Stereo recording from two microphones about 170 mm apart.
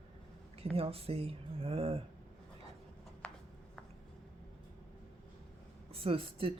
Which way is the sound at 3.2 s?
5° left (ahead or behind).